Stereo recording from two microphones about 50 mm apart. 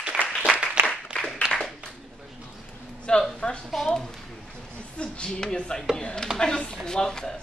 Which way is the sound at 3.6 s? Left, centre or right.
Centre.